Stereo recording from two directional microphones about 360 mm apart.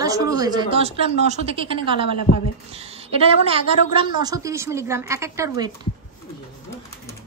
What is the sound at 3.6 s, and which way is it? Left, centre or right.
A woman's voice, centre.